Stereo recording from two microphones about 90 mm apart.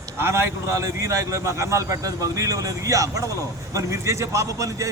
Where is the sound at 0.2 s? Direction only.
30° right (ahead or behind).